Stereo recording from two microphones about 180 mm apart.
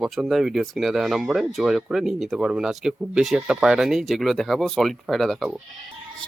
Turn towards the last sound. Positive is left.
turn(degrees=0)  # may be behind; listen again after turning